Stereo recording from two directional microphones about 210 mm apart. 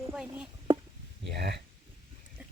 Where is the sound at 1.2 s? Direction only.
50° right (ahead or behind).